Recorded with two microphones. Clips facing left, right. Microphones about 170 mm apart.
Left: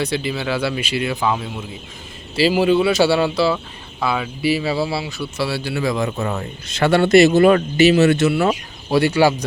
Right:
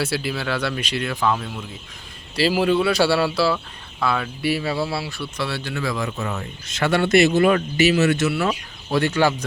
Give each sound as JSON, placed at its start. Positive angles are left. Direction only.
{"t": 0.0, "sound": "speech", "side_deg": -5}
{"t": 6.1, "sound": "speech", "side_deg": 35}
{"t": 8.9, "sound": "speech", "side_deg": 10}